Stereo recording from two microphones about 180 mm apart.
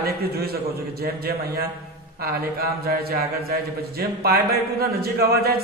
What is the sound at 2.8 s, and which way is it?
Speech, 60° right (ahead or behind).